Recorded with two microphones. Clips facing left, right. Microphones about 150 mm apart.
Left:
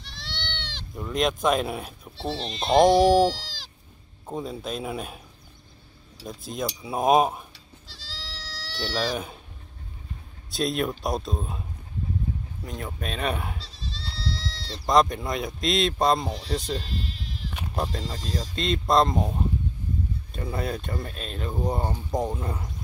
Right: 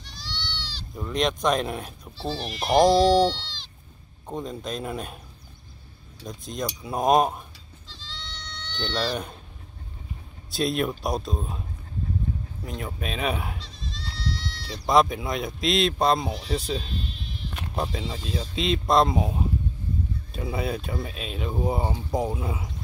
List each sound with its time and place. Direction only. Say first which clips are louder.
0.0 s goat: even; 60° left (ahead or behind)
0.9 s speech: even; centre (ahead or behind)
2.4 s speech: left 1 dB; 25° left (ahead or behind); by 5.2 s 5° left (ahead or behind)
6.2 s speech: left 1 dB; 5° left (ahead or behind)
7.9 s goat: right 2 dB; 40° left (ahead or behind)
8.7 s speech: even; 5° left (ahead or behind)
10.5 s speech: right 1 dB; centre (ahead or behind)
12.6 s speech: right 1 dB; centre (ahead or behind)
13.6 s goat: even; 30° left (ahead or behind)
14.7 s speech: even; centre (ahead or behind)
16.9 s bleat: even; 90° left
17.5 s speech: even; centre (ahead or behind)